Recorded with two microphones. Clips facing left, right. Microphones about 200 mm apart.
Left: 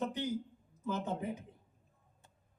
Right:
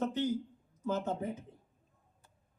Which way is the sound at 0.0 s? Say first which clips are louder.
Right 4 dB; 15° left (ahead or behind).